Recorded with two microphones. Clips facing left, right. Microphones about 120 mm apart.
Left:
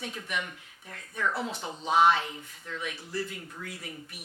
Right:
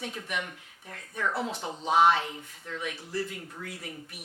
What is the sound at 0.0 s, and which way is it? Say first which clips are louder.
Speech: even; 45° right (ahead or behind).